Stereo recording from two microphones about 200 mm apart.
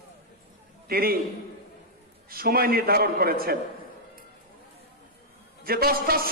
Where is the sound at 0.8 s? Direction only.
50° right (ahead or behind).